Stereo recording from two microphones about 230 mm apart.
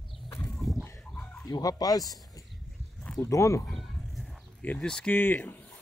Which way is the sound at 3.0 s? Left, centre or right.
Centre.